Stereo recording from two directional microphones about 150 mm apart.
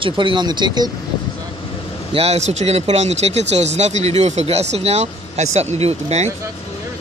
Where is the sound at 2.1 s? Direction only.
45° right (ahead or behind).